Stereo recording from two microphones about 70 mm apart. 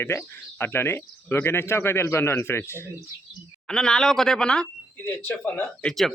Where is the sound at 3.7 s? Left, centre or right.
Centre.